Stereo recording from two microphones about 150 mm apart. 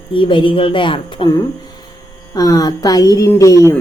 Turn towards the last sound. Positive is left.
turn(degrees=20)  # may be behind; listen again after turning